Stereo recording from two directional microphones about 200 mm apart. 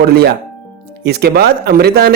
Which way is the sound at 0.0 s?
50° right (ahead or behind).